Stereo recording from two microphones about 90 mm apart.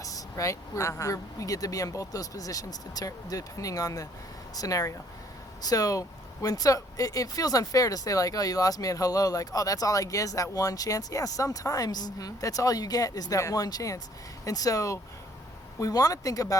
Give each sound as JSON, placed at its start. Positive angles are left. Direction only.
{"t": 0.0, "sound": "speech", "side_deg": 40}